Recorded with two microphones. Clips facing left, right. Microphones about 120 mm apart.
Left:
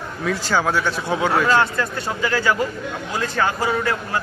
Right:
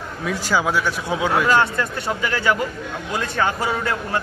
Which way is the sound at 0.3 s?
10° right (ahead or behind).